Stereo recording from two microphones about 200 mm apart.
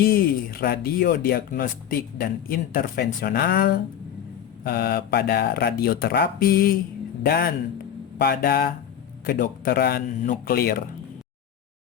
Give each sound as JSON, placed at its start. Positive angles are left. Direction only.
{"t": 0.0, "sound": "speech", "side_deg": 45}